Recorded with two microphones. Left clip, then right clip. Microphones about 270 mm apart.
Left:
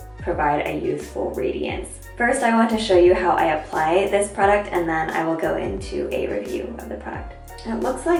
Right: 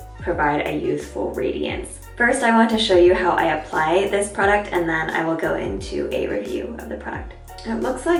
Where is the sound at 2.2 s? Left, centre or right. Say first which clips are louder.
Right 2 dB; centre.